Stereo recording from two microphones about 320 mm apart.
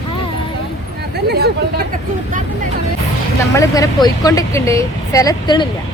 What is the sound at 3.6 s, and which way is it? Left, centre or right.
Speech, centre.